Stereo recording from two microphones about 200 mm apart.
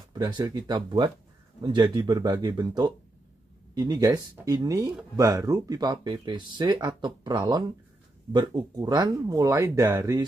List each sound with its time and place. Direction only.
0.1 s speech: 20° right (ahead or behind)